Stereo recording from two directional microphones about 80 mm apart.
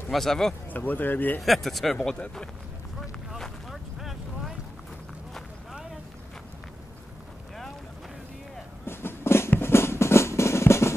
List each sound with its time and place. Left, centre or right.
0.1 s speech: centre
0.7 s speech: left
1.4 s speech: centre
3.0 s boat: centre
8.8 s music: left